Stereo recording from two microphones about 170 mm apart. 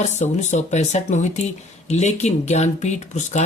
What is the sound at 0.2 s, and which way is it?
Speech, 40° left (ahead or behind).